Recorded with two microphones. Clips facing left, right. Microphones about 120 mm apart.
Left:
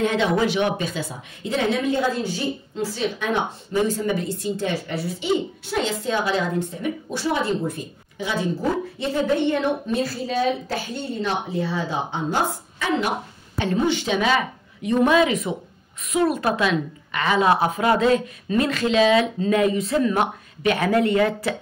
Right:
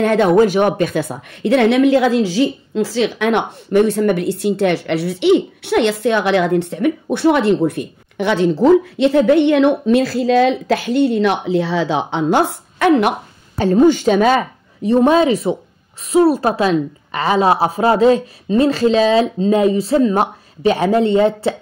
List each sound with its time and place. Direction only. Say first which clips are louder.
0.0 s a woman's voice: right 8 dB; 50° right (ahead or behind)
13.6 s a woman's voice: right 10 dB; 40° right (ahead or behind)